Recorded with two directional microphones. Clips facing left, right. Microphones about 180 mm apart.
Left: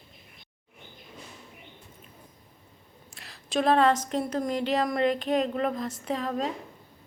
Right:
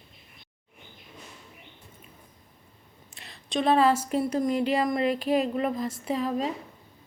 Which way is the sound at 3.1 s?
Centre (ahead or behind).